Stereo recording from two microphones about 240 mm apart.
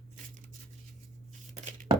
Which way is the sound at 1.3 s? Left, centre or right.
Right.